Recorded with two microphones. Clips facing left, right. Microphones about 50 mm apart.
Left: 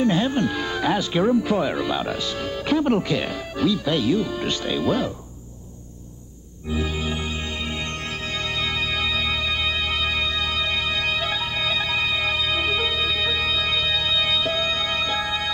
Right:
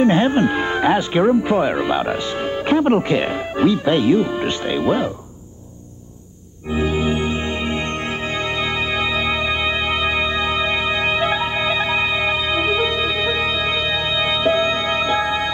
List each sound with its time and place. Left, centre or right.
0.0 s speech: right
6.7 s music: right